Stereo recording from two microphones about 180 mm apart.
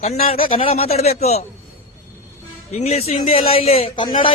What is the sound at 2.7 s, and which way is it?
Speech, 35° left (ahead or behind).